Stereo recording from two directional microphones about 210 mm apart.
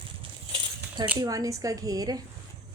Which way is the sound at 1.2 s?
15° right (ahead or behind).